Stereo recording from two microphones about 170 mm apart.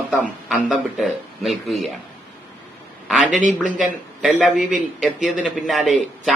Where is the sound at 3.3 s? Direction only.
45° right (ahead or behind).